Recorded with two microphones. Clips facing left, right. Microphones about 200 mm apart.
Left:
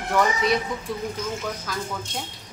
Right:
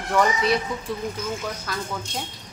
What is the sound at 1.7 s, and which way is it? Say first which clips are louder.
Speech: right 1 dB; centre (ahead or behind).